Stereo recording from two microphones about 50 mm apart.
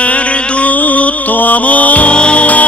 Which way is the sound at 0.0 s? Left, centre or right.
Left.